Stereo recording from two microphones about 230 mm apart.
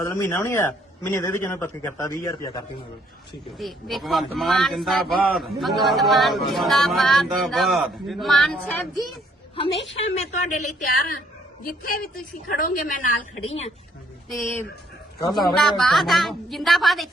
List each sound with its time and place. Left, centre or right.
0.0 s a man's voice: centre
3.6 s speech: centre
9.9 s a woman's voice: left
14.4 s a man's voice: centre